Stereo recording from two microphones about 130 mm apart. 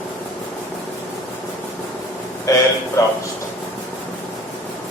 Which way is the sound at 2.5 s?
25° left (ahead or behind).